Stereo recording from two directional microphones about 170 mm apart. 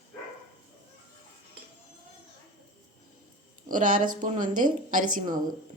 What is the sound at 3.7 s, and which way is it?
Speech, 50° right (ahead or behind).